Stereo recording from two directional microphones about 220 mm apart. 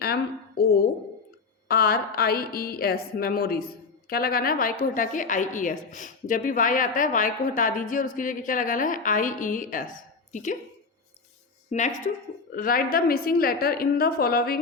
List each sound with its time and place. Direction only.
0.0 s a woman's voice: 45° left (ahead or behind)
12.0 s a woman's voice: 40° left (ahead or behind)